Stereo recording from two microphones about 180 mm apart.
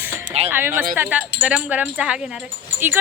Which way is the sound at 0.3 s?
35° right (ahead or behind).